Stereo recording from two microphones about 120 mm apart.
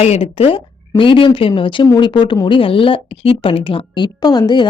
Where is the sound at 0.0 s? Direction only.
60° left (ahead or behind).